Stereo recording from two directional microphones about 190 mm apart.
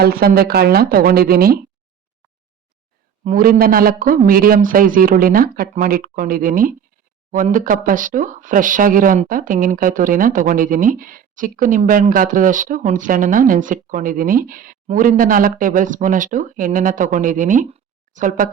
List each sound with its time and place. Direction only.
0.0 s speech: 50° right (ahead or behind)
3.2 s speech: 45° right (ahead or behind)